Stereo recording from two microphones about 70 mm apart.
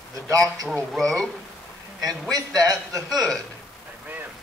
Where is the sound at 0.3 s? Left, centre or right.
Right.